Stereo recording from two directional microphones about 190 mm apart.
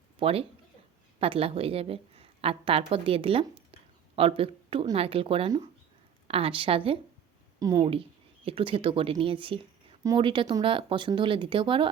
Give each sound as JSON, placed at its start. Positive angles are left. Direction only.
{"t": 0.2, "sound": "a woman's voice", "side_deg": -30}